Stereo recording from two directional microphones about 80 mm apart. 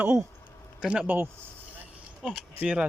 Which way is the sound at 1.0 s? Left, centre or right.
Right.